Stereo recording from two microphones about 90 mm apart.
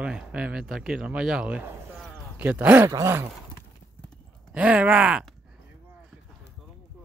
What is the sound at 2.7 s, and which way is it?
Speech, 35° right (ahead or behind).